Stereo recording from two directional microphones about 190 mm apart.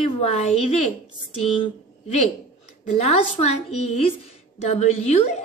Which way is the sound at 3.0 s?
35° left (ahead or behind).